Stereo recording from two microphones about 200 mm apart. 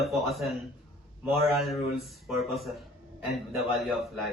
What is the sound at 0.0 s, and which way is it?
A woman's voice, centre (ahead or behind).